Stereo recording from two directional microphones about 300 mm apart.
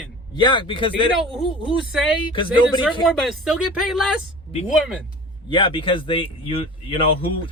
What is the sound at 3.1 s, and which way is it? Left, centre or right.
Speech, centre.